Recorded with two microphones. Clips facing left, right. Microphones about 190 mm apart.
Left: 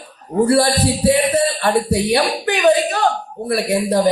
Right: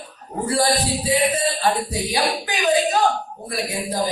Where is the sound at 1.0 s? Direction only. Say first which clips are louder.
Left 7 dB; 65° left (ahead or behind).